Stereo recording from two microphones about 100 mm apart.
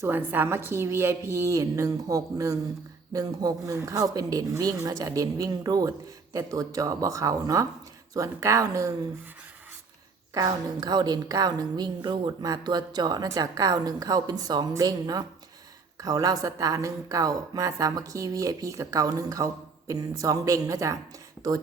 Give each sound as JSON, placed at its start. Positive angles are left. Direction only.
{"t": 0.0, "sound": "a woman's voice", "side_deg": -20}
{"t": 10.3, "sound": "a woman's voice", "side_deg": -40}